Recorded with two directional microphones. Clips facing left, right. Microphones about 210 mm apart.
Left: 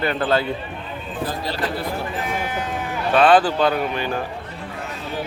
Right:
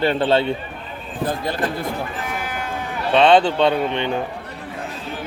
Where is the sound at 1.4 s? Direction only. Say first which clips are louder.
Right 2 dB; 50° right (ahead or behind).